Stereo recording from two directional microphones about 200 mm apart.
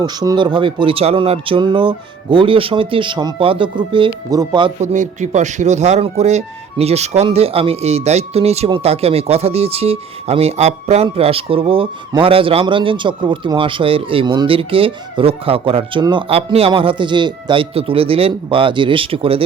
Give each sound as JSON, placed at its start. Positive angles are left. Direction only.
{"t": 0.0, "sound": "speech", "side_deg": -20}
{"t": 4.8, "sound": "speech", "side_deg": -35}